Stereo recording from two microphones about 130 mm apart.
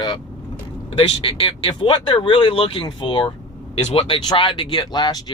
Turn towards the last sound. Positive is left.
turn(degrees=30)  # may be behind; listen again after turning